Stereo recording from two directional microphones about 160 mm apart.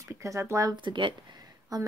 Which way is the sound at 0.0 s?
20° right (ahead or behind).